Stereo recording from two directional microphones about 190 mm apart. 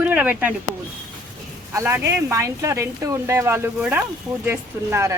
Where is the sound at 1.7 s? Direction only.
15° right (ahead or behind).